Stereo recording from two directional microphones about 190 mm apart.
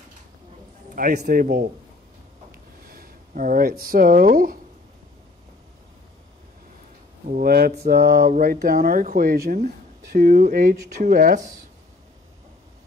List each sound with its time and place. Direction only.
0.9 s speech: 50° right (ahead or behind)
2.5 s a sound: 50° right (ahead or behind)
7.2 s speech: 50° right (ahead or behind)